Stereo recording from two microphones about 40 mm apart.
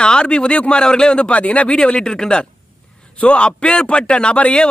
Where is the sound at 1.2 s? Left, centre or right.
Left.